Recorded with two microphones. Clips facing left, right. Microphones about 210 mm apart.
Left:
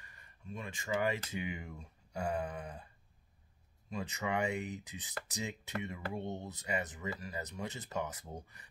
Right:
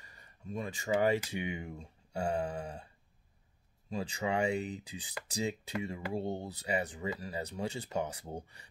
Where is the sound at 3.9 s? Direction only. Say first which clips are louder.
Right 3 dB; 30° right (ahead or behind).